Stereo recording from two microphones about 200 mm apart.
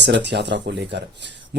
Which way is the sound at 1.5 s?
60° right (ahead or behind).